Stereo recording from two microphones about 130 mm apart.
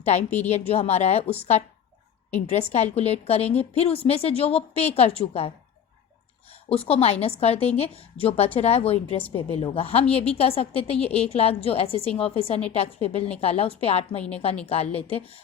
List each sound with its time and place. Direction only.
0.2 s a woman's voice: 15° left (ahead or behind)
0.7 s a woman's voice: 55° left (ahead or behind)
2.7 s a woman's voice: 55° left (ahead or behind)
6.5 s a woman's voice: 45° left (ahead or behind)